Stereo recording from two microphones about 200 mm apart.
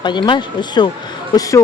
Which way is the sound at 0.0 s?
25° left (ahead or behind).